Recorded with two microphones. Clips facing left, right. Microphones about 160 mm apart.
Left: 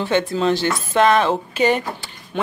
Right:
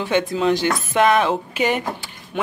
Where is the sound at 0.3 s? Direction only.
15° right (ahead or behind).